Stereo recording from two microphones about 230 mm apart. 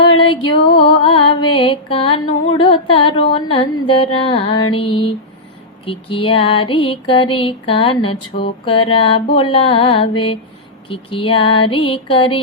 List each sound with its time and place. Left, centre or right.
0.2 s music: left